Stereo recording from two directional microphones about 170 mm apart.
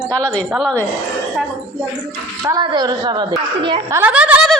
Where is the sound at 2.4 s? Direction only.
20° right (ahead or behind).